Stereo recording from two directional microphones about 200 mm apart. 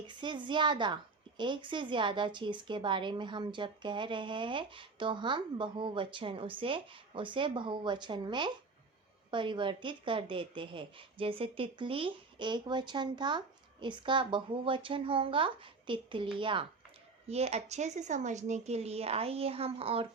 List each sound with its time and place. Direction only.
0.1 s a woman's voice: 25° right (ahead or behind)